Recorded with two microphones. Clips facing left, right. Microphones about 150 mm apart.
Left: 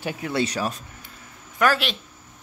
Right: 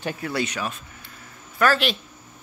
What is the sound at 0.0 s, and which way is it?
Speech, 10° left (ahead or behind).